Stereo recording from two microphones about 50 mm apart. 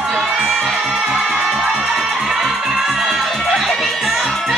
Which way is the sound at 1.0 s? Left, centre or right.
Centre.